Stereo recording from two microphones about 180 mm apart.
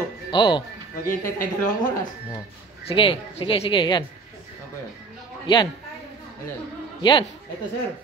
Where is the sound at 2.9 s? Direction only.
30° left (ahead or behind).